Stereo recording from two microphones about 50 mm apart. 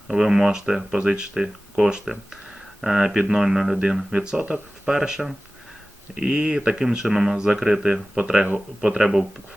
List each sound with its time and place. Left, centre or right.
0.1 s speech: centre
4.9 s speech: centre
6.1 s speech: right